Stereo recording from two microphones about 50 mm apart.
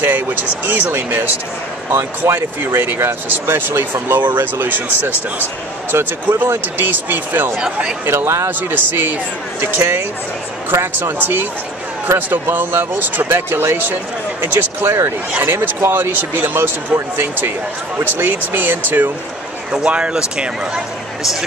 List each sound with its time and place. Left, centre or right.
0.0 s speech: right
1.9 s speech: right
3.6 s speech: right
19.7 s speech: right
21.2 s speech: centre